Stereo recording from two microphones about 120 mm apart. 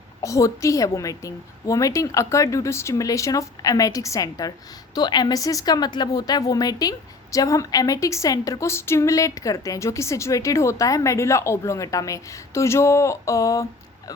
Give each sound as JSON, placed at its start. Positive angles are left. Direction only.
{"t": 0.2, "sound": "a woman's voice", "side_deg": 25}